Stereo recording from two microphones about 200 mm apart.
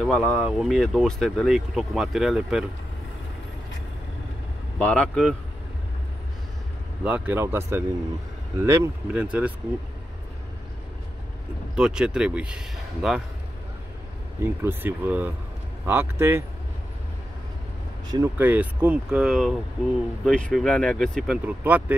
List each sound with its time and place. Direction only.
0.0 s speech: 5° left (ahead or behind)
4.7 s speech: 5° left (ahead or behind)
7.1 s speech: 10° right (ahead or behind)
11.7 s speech: 5° right (ahead or behind)
14.4 s speech: 10° right (ahead or behind)
18.1 s speech: 10° right (ahead or behind)